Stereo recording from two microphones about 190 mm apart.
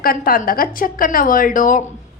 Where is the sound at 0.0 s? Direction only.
50° left (ahead or behind).